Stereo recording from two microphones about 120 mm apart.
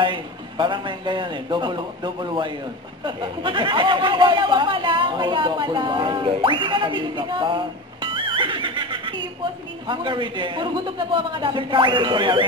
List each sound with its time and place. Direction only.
0.0 s a man's voice: 40° right (ahead or behind)